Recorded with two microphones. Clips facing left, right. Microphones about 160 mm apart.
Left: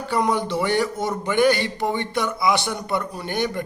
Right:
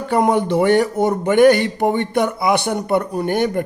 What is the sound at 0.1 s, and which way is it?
A man's voice, 55° right (ahead or behind).